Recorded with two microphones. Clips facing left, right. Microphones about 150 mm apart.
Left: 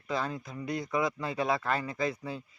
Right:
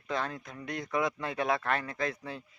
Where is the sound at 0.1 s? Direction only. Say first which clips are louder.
Left 1 dB; 5° left (ahead or behind).